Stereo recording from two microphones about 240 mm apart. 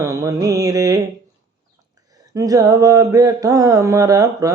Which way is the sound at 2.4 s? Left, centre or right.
Centre.